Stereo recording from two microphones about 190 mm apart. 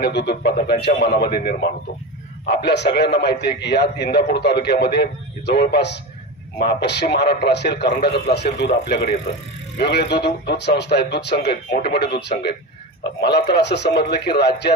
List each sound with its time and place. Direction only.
0.0 s a man's voice: 60° left (ahead or behind)